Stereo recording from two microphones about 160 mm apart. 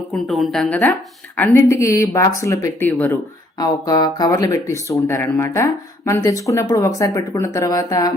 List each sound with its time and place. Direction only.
0.1 s a woman's voice: centre (ahead or behind)
3.6 s speech: 25° left (ahead or behind)